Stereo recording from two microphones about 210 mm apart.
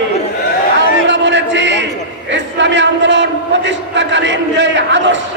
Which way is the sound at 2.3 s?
60° right (ahead or behind).